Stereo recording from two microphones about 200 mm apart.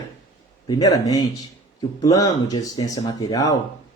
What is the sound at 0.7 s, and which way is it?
Speech, 20° left (ahead or behind).